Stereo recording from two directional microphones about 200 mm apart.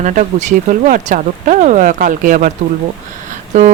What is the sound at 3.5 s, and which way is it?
Speech, 35° right (ahead or behind).